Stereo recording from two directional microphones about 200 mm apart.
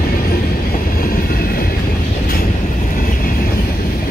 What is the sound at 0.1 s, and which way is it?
Train, 45° left (ahead or behind).